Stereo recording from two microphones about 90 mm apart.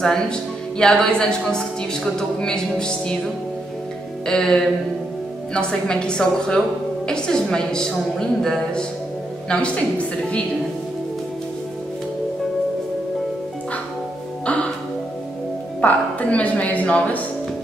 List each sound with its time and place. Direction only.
0.0 s speech: 10° left (ahead or behind)
4.3 s speech: 10° left (ahead or behind)
14.4 s music: 10° left (ahead or behind)
15.8 s a woman's voice: 15° left (ahead or behind)